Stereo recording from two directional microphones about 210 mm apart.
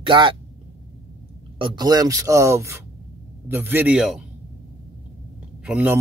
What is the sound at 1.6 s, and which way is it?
Speech, 20° right (ahead or behind).